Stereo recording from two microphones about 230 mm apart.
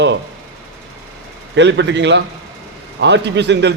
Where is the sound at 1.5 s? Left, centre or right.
Right.